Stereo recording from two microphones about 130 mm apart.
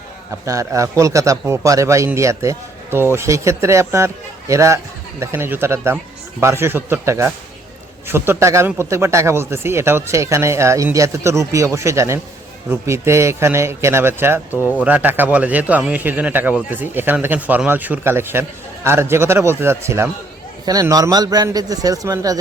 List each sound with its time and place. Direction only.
0.4 s speech: 25° right (ahead or behind)
14.5 s speech: 20° left (ahead or behind)
14.8 s a man's voice: 10° right (ahead or behind); by 22.4 s 30° right (ahead or behind)